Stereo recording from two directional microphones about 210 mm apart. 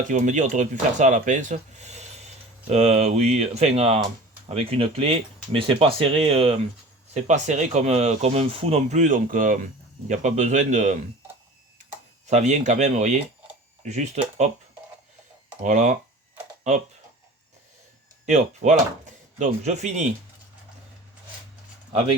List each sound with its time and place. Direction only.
0.1 s speech: 35° right (ahead or behind)
12.3 s speech: 35° right (ahead or behind)
15.6 s speech: 35° right (ahead or behind)
18.3 s speech: 35° right (ahead or behind)